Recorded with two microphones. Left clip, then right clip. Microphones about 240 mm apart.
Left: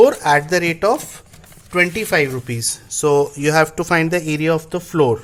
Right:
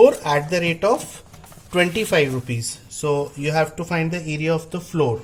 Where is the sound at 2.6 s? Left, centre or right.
Left.